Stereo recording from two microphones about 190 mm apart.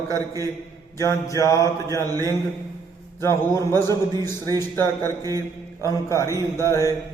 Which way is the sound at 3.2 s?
15° left (ahead or behind).